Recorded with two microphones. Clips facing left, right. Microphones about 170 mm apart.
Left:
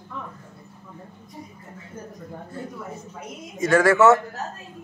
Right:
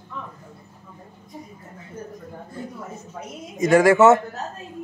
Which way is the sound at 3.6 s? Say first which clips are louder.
Right 2 dB; 15° right (ahead or behind).